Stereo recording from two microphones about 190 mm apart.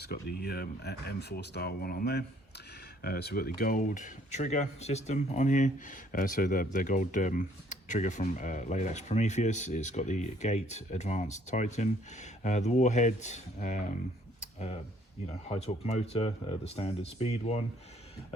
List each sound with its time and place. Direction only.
0.0 s speech: 55° left (ahead or behind); by 13.9 s 40° left (ahead or behind)
14.4 s a sound: 35° left (ahead or behind)
15.3 s speech: 35° left (ahead or behind)